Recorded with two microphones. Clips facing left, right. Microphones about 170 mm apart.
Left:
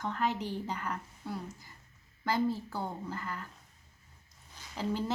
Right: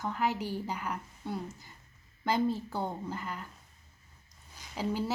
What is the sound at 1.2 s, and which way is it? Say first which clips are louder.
A woman's voice: right 3 dB; 25° right (ahead or behind).